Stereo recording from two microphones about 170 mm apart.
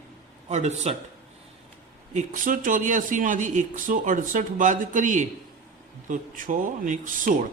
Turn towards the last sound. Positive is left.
turn(degrees=-50)  # may be behind; listen again after turning